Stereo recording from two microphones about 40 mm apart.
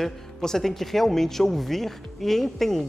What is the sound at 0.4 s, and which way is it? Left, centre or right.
A man's voice, centre.